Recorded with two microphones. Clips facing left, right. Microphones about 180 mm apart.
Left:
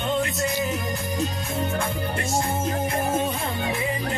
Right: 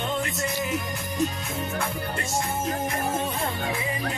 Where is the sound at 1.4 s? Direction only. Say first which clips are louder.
Left 3 dB; 30° left (ahead or behind).